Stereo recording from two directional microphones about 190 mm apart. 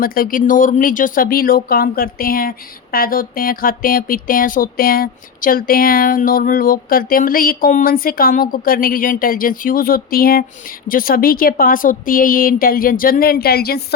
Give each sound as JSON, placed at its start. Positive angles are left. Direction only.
{"t": 0.0, "sound": "speech", "side_deg": 50}